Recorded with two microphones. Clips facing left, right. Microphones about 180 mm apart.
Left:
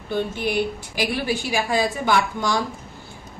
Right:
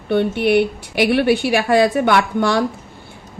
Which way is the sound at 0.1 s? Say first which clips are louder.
Right 9 dB; 70° right (ahead or behind).